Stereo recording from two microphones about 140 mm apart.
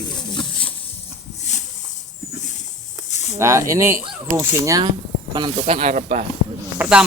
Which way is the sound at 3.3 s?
20° right (ahead or behind).